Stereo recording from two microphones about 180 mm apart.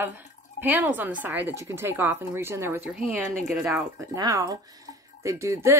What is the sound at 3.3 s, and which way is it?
Speech, 5° left (ahead or behind).